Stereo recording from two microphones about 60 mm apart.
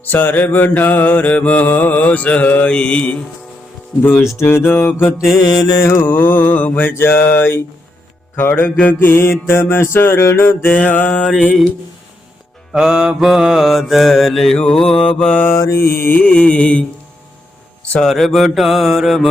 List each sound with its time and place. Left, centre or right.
0.0 s mantra: left
4.4 s mantra: left
5.3 s mantra: left
5.8 s mantra: left
6.1 s mantra: left
8.9 s music: left
10.7 s mantra: left
12.8 s mantra: centre
15.5 s music: left
16.1 s mantra: left
18.0 s mantra: centre